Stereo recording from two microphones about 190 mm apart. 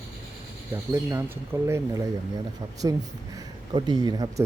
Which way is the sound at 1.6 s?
15° right (ahead or behind).